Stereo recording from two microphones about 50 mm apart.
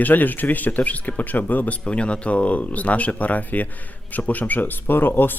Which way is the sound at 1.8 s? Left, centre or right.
Left.